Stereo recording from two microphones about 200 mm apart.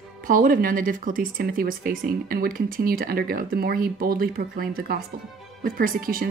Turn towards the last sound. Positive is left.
turn(degrees=-45)  # may be behind; listen again after turning